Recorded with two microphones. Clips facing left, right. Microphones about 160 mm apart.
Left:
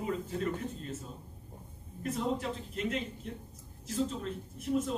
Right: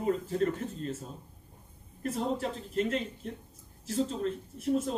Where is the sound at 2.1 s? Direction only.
35° right (ahead or behind).